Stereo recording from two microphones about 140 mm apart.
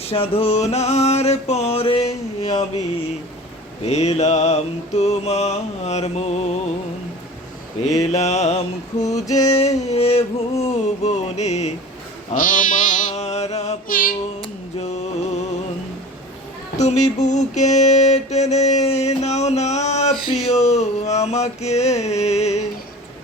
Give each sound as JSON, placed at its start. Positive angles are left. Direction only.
{"t": 0.0, "sound": "mantra", "side_deg": 45}
{"t": 3.8, "sound": "mantra", "side_deg": 50}
{"t": 7.9, "sound": "mantra", "side_deg": 50}
{"t": 9.2, "sound": "music", "side_deg": 25}
{"t": 9.5, "sound": "music", "side_deg": 50}
{"t": 12.3, "sound": "a sound", "side_deg": 70}
{"t": 13.8, "sound": "female singing", "side_deg": 85}
{"t": 14.4, "sound": "a sound", "side_deg": 50}
{"t": 16.7, "sound": "mantra", "side_deg": 55}